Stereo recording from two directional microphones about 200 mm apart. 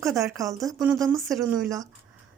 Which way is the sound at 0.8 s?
5° right (ahead or behind).